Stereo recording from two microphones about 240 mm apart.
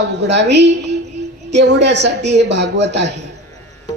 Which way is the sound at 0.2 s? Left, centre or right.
Right.